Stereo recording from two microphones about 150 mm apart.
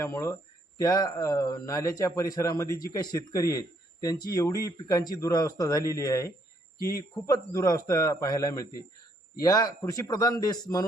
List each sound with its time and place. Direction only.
0.0 s a man's voice: 20° left (ahead or behind)